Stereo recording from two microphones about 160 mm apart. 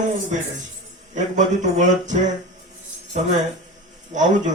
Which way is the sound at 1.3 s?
50° right (ahead or behind).